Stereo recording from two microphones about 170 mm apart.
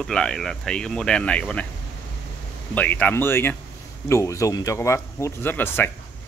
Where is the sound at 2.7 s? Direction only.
10° left (ahead or behind).